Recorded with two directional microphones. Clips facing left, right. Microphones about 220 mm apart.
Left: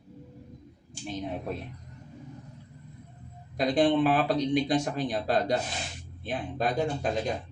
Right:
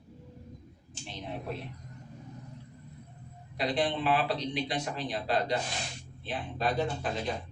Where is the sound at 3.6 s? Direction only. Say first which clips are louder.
Left 7 dB; 45° left (ahead or behind).